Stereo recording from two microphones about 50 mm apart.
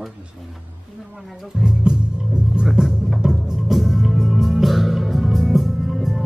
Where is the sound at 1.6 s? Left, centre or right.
Centre.